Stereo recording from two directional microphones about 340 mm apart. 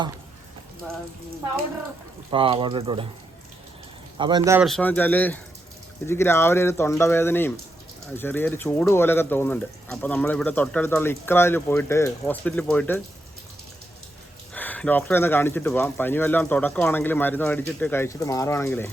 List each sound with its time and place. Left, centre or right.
2.3 s speech: centre
4.2 s speech: centre
14.5 s speech: centre